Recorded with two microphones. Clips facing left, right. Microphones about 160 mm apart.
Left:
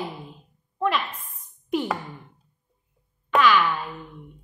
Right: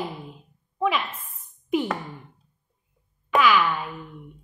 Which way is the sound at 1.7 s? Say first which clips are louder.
Right 1 dB; centre (ahead or behind).